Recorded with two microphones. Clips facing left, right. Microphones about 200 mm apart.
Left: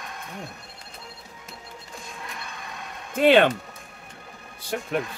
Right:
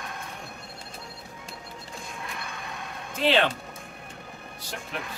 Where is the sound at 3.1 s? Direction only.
55° left (ahead or behind).